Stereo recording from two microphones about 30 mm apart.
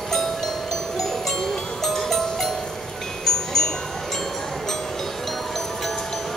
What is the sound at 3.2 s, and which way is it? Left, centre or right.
Wind chime, centre.